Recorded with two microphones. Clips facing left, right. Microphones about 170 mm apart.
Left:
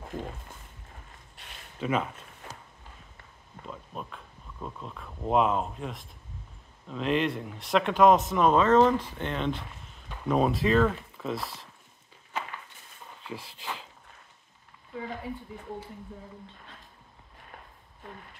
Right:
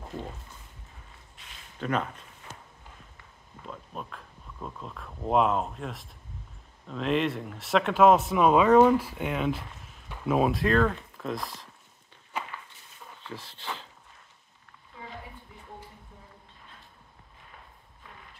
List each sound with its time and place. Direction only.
1.8 s speech: 5° left (ahead or behind)
2.5 s walk: 35° left (ahead or behind)
3.6 s speech: centre (ahead or behind)
12.3 s walk: 10° right (ahead or behind)
13.2 s speech: 10° left (ahead or behind)